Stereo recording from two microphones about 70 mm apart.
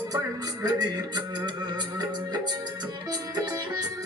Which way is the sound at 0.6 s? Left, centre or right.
Right.